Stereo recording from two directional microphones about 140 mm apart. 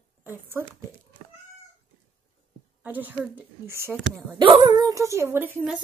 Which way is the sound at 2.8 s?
10° right (ahead or behind).